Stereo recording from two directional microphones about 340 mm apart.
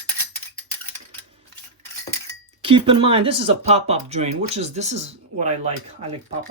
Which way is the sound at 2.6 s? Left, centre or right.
Centre.